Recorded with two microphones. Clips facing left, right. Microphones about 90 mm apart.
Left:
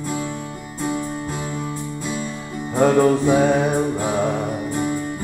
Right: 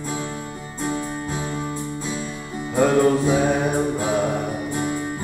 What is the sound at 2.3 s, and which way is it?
Music, 20° left (ahead or behind).